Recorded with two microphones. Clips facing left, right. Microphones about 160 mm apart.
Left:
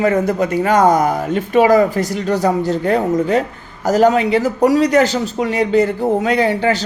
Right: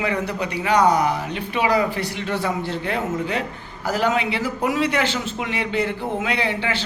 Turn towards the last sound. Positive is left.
turn(degrees=40)  # may be behind; listen again after turning